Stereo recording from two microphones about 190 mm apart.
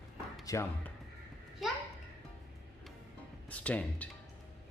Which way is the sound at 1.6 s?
Centre (ahead or behind).